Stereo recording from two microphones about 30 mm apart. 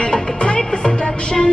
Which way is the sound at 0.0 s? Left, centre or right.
Left.